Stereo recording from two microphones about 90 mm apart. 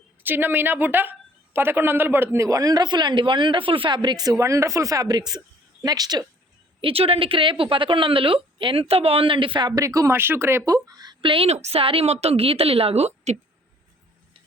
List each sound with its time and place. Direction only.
0.2 s a man's voice: 20° right (ahead or behind)
2.5 s speech: 40° right (ahead or behind)
6.8 s a woman's voice: 90° right; by 9.8 s 55° right (ahead or behind)
9.8 s speech: 35° right (ahead or behind)
10.2 s a man's voice: 25° right (ahead or behind)
10.7 s speech: 45° right (ahead or behind)
11.2 s a woman's voice: 80° right